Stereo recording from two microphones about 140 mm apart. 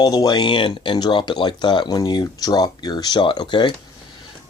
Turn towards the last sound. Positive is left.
turn(degrees=35)  # may be behind; listen again after turning